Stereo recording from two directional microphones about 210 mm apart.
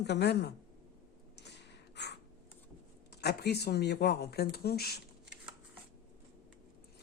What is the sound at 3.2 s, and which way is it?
Speech, 50° left (ahead or behind).